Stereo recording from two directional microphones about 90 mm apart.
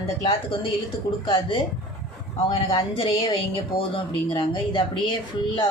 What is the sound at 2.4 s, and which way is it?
A woman's voice, 70° left (ahead or behind).